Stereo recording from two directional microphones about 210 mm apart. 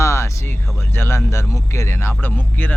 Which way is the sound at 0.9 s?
10° left (ahead or behind).